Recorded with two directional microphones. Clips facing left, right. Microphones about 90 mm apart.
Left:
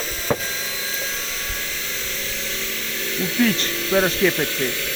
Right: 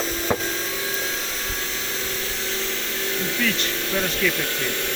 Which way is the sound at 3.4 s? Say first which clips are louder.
Left 8 dB; 45° left (ahead or behind).